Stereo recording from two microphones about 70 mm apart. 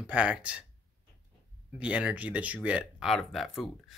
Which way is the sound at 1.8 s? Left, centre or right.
Centre.